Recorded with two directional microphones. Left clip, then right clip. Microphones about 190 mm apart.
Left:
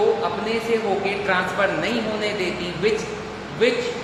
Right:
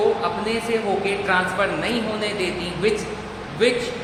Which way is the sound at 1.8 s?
10° right (ahead or behind).